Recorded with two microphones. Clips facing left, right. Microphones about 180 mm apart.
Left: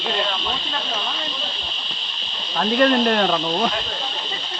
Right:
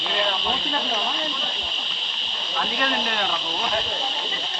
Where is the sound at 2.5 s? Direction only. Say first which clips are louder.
Left 10 dB; 45° left (ahead or behind).